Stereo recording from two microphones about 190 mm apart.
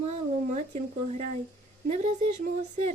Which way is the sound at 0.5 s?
40° right (ahead or behind).